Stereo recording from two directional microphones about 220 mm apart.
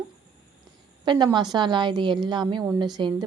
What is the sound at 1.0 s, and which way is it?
A woman's voice, 20° right (ahead or behind).